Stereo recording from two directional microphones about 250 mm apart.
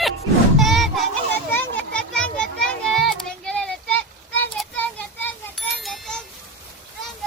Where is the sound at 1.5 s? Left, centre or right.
Centre.